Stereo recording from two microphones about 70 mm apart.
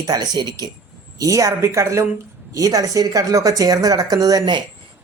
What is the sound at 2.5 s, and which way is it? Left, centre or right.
A man's voice, right.